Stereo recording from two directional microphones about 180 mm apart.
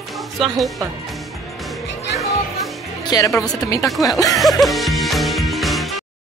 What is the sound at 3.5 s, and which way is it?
Speech, 20° left (ahead or behind).